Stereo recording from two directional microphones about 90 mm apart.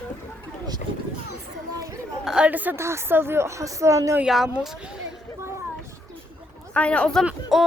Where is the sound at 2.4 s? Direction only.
20° right (ahead or behind).